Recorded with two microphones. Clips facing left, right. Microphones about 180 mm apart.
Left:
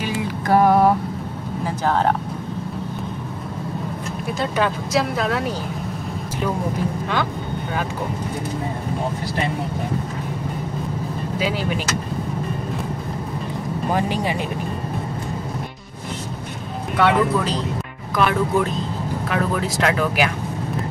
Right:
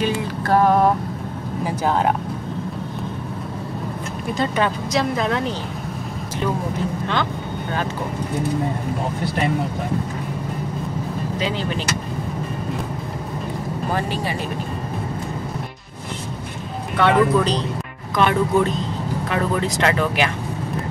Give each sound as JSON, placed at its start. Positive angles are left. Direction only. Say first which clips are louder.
{"t": 0.0, "sound": "mantra", "louder": "right 2 dB", "side_deg": 10}
{"t": 1.9, "sound": "speech", "louder": "even", "side_deg": -10}
{"t": 4.4, "sound": "speech", "louder": "right 1 dB", "side_deg": 0}
{"t": 11.3, "sound": "speech", "louder": "left 2 dB", "side_deg": 10}
{"t": 13.9, "sound": "speech", "louder": "left 3 dB", "side_deg": 15}
{"t": 16.9, "sound": "speech", "louder": "right 2 dB", "side_deg": 5}